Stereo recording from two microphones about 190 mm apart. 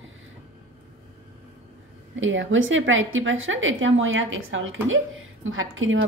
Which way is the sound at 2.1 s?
90° right.